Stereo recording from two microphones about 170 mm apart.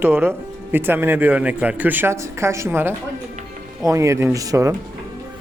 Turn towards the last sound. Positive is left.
turn(degrees=-20)  # may be behind; listen again after turning